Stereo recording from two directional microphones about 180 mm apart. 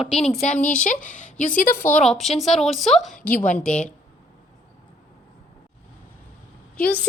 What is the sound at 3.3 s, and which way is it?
Speech, 45° left (ahead or behind).